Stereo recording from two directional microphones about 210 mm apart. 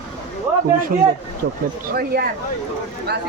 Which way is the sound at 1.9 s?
45° right (ahead or behind).